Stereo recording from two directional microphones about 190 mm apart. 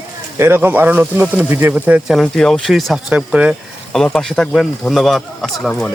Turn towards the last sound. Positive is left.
turn(degrees=0)  # may be behind; listen again after turning